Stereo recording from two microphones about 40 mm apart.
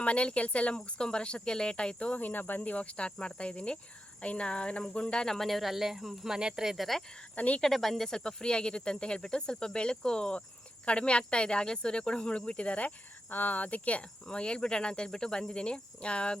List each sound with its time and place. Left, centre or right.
0.0 s cricket: left
0.9 s speech: left
2.1 s cricket: left
4.2 s speech: left
5.2 s speech: centre
5.5 s speech: centre
6.7 s speech: centre
7.3 s cricket: left
7.6 s speech: centre
8.2 s speech: left
13.3 s speech: left